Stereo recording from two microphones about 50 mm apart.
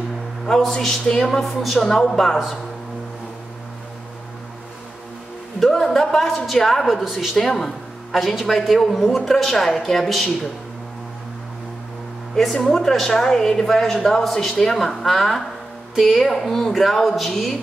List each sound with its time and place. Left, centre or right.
0.5 s a man's voice: centre
5.6 s a man's voice: centre
7.3 s a man's voice: centre
12.4 s a woman's voice: centre